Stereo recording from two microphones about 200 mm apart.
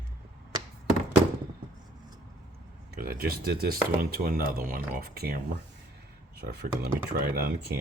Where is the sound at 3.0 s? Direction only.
45° right (ahead or behind).